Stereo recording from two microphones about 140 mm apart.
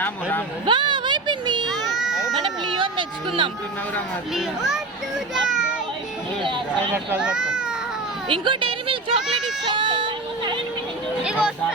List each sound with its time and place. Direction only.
0.0 s speech: 15° left (ahead or behind)
0.6 s a sound: 35° right (ahead or behind)
1.7 s a sound: centre (ahead or behind)
2.4 s music: 35° right (ahead or behind)
4.4 s a child's voice: 5° right (ahead or behind)
6.4 s speech: 35° right (ahead or behind)
6.9 s speech: 10° right (ahead or behind)
8.3 s a sound: 35° right (ahead or behind)
11.2 s speech: 5° right (ahead or behind)